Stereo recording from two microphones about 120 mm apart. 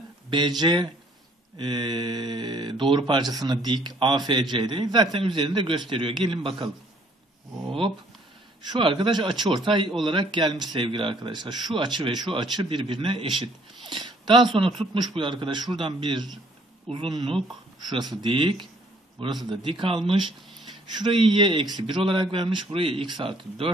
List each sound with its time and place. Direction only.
0.3 s speech: 40° right (ahead or behind)
8.6 s speech: 45° right (ahead or behind)
13.8 s a sound: 40° right (ahead or behind)
14.8 s speech: 40° right (ahead or behind)